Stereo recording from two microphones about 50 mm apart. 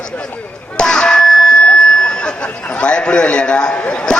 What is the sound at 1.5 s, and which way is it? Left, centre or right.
Speech, centre.